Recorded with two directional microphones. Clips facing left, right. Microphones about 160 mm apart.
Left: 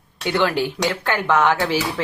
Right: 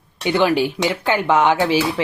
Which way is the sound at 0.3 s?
15° right (ahead or behind).